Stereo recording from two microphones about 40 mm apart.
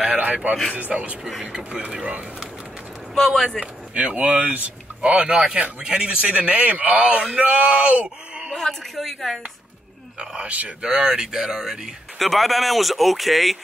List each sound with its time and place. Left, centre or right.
0.1 s a sound: right
0.7 s a man's voice: right
3.2 s speech: centre
3.5 s a man's voice: right
9.0 s speech: centre
10.1 s speech: right
10.8 s speech: centre
12.2 s speech: centre